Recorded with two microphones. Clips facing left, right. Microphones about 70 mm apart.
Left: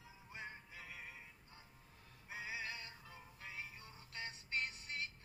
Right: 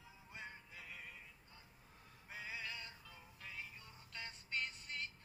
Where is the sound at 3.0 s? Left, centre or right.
Left.